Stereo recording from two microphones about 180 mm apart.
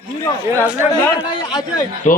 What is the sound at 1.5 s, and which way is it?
Speech, 20° left (ahead or behind).